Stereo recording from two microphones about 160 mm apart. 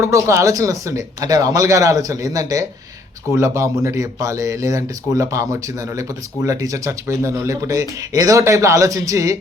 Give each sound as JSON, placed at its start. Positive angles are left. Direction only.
{"t": 0.0, "sound": "speech", "side_deg": -20}